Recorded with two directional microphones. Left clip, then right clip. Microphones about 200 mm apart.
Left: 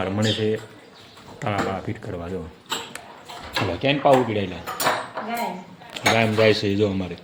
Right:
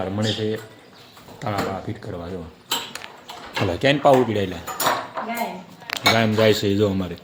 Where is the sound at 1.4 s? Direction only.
5° left (ahead or behind).